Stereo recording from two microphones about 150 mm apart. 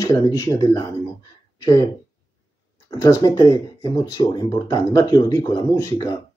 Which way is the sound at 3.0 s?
20° left (ahead or behind).